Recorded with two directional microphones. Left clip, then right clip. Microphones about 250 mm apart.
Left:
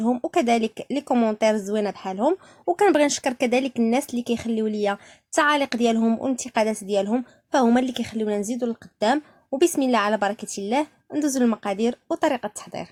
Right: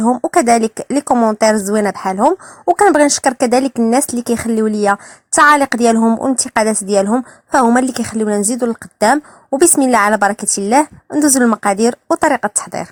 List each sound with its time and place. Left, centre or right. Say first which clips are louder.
0.0 s speech: right 9 dB; right